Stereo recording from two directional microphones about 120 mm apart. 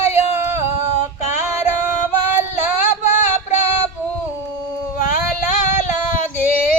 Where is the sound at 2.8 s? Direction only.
90° left.